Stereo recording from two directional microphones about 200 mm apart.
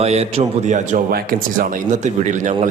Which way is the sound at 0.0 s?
30° right (ahead or behind).